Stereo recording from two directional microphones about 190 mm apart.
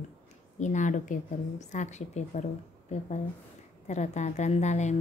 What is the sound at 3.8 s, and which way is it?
Speech, 35° left (ahead or behind).